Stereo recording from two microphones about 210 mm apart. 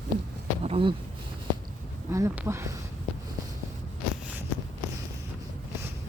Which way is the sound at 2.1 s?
15° right (ahead or behind).